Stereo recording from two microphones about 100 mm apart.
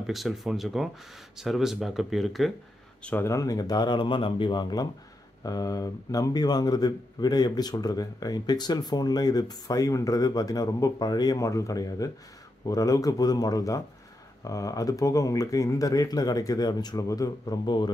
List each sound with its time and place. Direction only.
0.0 s speech: centre (ahead or behind)
3.2 s speech: 30° left (ahead or behind); by 17.9 s 45° left (ahead or behind)